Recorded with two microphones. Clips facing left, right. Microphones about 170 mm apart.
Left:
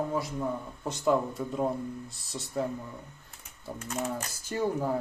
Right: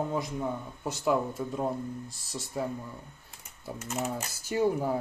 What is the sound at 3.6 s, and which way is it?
Speech, 10° right (ahead or behind).